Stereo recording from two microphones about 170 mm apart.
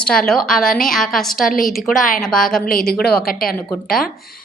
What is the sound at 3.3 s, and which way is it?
Speech, 60° left (ahead or behind).